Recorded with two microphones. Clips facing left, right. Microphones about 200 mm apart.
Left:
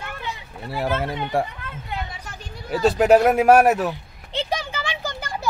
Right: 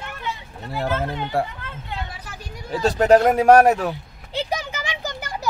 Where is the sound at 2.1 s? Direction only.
5° right (ahead or behind).